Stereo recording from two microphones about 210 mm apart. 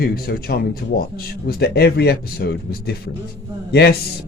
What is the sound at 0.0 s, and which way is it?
A man's voice, 45° left (ahead or behind).